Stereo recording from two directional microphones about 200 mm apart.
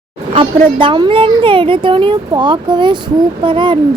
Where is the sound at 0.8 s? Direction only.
25° right (ahead or behind).